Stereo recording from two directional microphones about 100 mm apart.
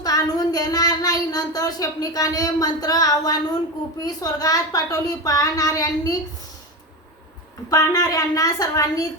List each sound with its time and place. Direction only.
0.0 s a woman's voice: 40° left (ahead or behind)
7.7 s a woman's voice: 40° left (ahead or behind)